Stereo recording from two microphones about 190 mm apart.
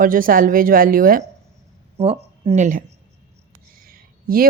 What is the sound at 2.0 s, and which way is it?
Speech, 35° right (ahead or behind).